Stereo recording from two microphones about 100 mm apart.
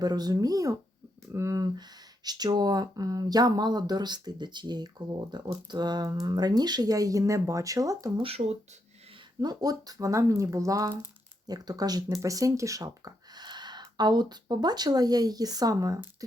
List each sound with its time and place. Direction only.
0.0 s speech: 40° right (ahead or behind)
8.2 s speech: 75° right (ahead or behind)
9.4 s speech: 40° right (ahead or behind)